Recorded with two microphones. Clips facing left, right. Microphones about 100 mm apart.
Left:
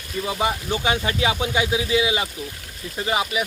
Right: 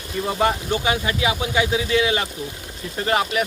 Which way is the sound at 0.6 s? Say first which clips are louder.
Right 1 dB; 15° left (ahead or behind).